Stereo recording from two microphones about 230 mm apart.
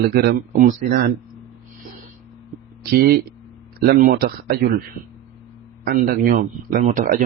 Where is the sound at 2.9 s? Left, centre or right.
Right.